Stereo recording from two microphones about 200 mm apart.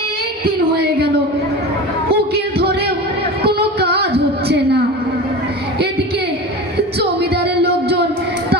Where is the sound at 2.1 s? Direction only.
50° right (ahead or behind).